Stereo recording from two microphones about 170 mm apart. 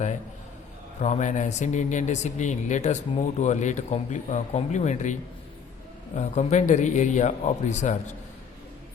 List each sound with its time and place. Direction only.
1.0 s speech: 45° left (ahead or behind)
6.1 s speech: 45° left (ahead or behind)